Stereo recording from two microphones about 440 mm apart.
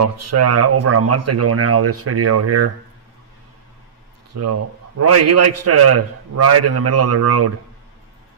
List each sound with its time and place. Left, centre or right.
0.0 s a man's voice: right
4.4 s a man's voice: right